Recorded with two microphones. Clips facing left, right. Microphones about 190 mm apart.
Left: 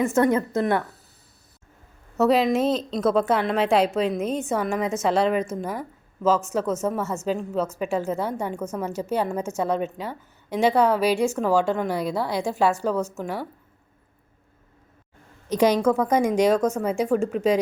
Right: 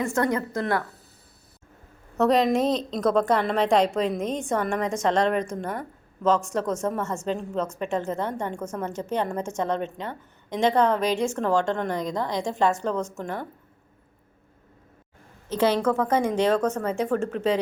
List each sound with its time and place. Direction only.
0.0 s a woman's voice: 20° left (ahead or behind)
2.1 s a woman's voice: 5° left (ahead or behind)
15.4 s a woman's voice: 15° left (ahead or behind)